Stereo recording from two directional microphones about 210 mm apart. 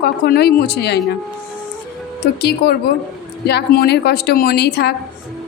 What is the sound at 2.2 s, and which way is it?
A woman's voice, 50° left (ahead or behind).